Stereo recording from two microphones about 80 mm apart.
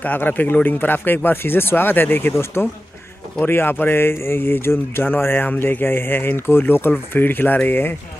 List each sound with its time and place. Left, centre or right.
0.0 s speech: left